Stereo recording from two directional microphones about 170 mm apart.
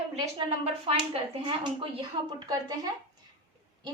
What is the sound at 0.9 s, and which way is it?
A woman's voice, 35° right (ahead or behind).